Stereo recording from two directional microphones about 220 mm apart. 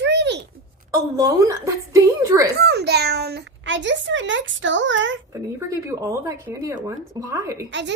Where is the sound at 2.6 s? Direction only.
50° right (ahead or behind).